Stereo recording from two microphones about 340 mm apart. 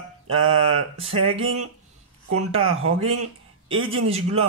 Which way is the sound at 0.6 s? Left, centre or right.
Right.